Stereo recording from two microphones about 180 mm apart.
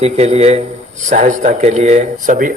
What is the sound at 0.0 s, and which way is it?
A man's voice, 35° right (ahead or behind).